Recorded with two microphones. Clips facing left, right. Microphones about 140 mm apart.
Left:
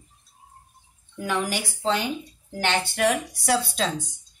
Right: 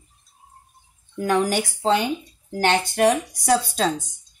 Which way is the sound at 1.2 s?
45° right (ahead or behind).